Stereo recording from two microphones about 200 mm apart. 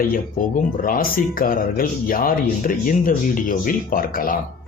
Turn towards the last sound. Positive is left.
turn(degrees=45)  # may be behind; listen again after turning